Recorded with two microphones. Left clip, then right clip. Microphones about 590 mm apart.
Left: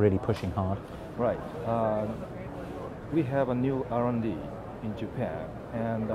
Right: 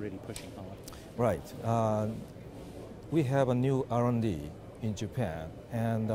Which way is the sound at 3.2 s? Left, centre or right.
Right.